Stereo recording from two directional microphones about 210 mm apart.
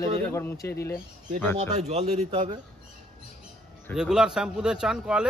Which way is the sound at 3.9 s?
5° right (ahead or behind).